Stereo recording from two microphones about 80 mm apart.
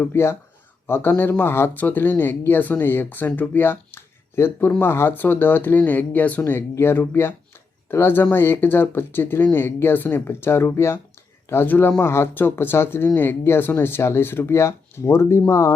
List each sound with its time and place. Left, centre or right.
0.1 s speech: left
6.4 s speech: left